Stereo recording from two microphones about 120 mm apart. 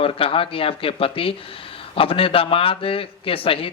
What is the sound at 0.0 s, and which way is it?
Speech, 50° left (ahead or behind).